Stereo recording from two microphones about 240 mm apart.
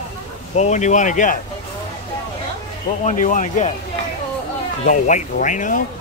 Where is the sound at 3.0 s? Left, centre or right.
Left.